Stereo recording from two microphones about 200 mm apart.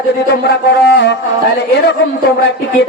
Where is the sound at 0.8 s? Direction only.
60° left (ahead or behind).